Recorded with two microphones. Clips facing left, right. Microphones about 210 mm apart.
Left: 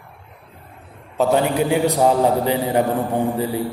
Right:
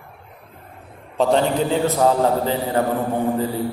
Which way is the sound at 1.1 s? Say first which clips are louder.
Even; 5° left (ahead or behind).